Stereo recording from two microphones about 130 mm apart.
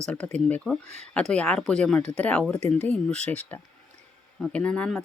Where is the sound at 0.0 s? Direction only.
10° left (ahead or behind).